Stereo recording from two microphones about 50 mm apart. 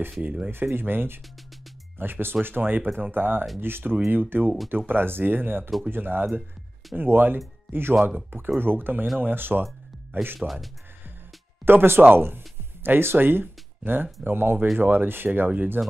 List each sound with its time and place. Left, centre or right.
0.2 s speech: right
0.5 s speech: right
10.4 s speech: centre
11.6 s speech: right